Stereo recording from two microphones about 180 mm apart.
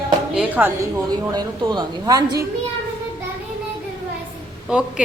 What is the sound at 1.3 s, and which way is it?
Speech, 25° right (ahead or behind).